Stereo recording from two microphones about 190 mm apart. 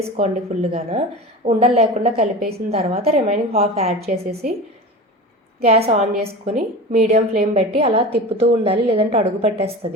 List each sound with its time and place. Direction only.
0.2 s a woman's voice: 35° right (ahead or behind)
5.5 s a woman's voice: 35° right (ahead or behind)